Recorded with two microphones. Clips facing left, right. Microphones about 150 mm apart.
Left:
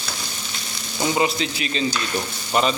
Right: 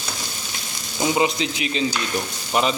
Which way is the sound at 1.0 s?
15° right (ahead or behind).